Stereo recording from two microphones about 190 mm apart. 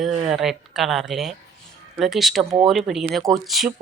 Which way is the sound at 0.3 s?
Centre (ahead or behind).